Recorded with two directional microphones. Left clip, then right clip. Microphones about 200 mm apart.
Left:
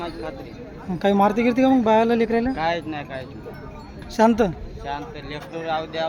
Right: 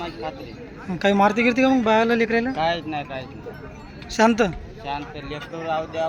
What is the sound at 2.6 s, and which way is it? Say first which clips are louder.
Speech: right 1 dB; 45° right (ahead or behind).